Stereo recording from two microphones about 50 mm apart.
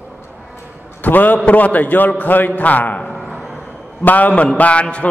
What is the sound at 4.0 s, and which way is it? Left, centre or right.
A man's voice, left.